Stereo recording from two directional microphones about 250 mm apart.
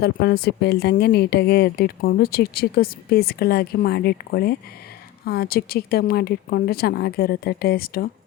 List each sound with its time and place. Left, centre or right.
0.0 s speech: left